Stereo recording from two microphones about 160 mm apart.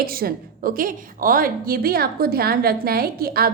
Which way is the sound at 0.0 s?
65° right (ahead or behind).